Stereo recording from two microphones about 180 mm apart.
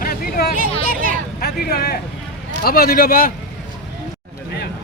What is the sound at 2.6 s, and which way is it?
Speech, 55° left (ahead or behind).